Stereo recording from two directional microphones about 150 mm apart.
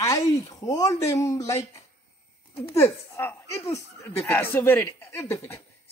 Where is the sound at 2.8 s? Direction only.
15° left (ahead or behind).